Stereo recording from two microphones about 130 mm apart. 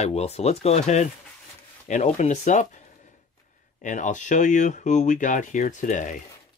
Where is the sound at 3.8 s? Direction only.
75° left (ahead or behind).